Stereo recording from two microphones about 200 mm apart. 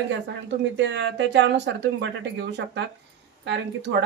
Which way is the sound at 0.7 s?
65° right (ahead or behind).